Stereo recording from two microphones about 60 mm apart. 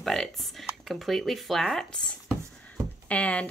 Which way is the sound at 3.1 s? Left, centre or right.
Left.